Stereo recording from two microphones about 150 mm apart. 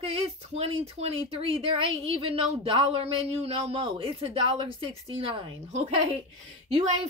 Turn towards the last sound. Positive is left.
turn(degrees=-45)  # may be behind; listen again after turning